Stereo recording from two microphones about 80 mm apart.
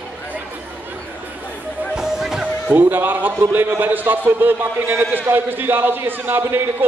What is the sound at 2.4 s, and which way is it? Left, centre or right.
A man's voice, right.